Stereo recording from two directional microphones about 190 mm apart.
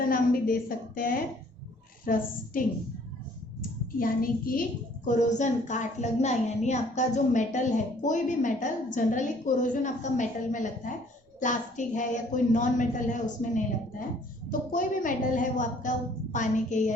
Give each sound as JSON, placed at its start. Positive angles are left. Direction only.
{"t": 0.0, "sound": "a woman's voice", "side_deg": 50}
{"t": 4.0, "sound": "a woman's voice", "side_deg": 50}
{"t": 14.7, "sound": "a woman's voice", "side_deg": 45}